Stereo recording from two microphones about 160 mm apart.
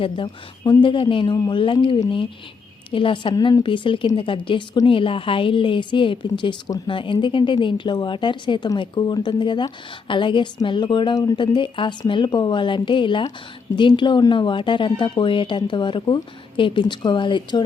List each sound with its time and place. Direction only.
0.0 s a woman's voice: 30° left (ahead or behind)